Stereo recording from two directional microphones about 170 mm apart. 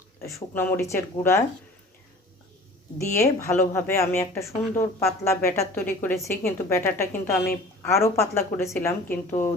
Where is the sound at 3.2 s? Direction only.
15° left (ahead or behind).